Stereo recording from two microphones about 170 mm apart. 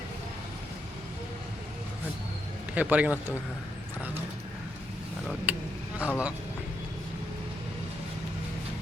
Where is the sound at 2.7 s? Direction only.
10° right (ahead or behind).